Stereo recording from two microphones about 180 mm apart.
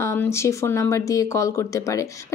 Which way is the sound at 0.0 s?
15° left (ahead or behind).